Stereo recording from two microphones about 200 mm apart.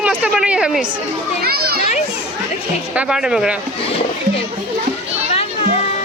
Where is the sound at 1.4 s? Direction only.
50° right (ahead or behind).